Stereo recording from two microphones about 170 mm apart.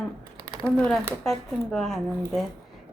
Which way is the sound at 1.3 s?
Centre (ahead or behind).